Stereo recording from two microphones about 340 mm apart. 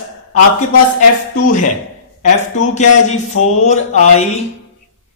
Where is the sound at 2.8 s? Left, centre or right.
Left.